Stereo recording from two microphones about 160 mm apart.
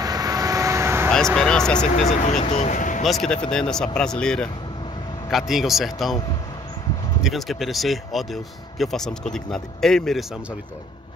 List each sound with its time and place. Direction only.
0.0 s vehicle: 25° right (ahead or behind)
1.1 s speech: 5° left (ahead or behind)
2.5 s speech: 50° left (ahead or behind)
3.0 s speech: centre (ahead or behind)
7.2 s speech: centre (ahead or behind)